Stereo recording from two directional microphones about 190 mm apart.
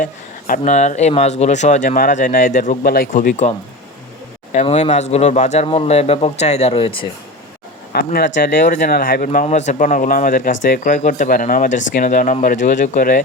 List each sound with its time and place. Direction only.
0.0 s speech: 45° left (ahead or behind)
4.5 s speech: 35° left (ahead or behind)
7.9 s speech: 55° left (ahead or behind)